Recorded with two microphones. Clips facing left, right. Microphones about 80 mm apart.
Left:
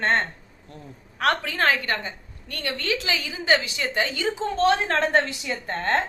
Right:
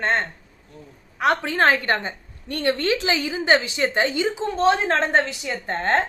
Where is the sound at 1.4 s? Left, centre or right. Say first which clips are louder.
Right 4 dB; right.